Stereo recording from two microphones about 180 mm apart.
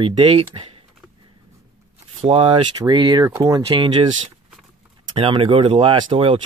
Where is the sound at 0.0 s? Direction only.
30° right (ahead or behind).